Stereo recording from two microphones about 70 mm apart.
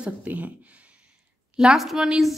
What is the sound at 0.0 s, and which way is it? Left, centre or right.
Speech, right.